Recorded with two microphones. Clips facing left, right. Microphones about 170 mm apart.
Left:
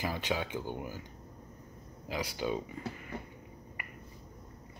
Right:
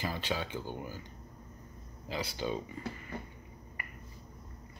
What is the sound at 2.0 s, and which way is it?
Speech, 10° left (ahead or behind).